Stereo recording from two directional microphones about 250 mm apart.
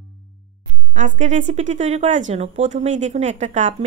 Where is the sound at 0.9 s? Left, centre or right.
Right.